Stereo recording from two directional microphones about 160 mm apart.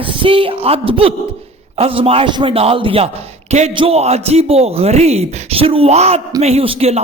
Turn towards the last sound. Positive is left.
turn(degrees=-40)  # may be behind; listen again after turning